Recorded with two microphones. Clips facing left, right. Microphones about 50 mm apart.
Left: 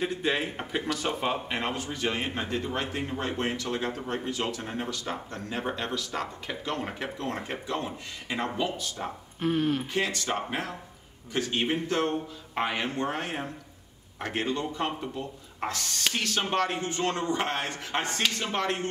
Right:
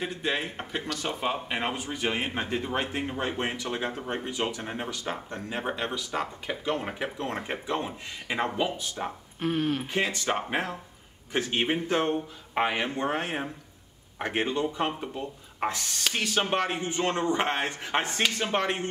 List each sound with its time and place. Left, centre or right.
0.0 s a man's voice: centre
9.4 s speech: centre
9.9 s a man's voice: centre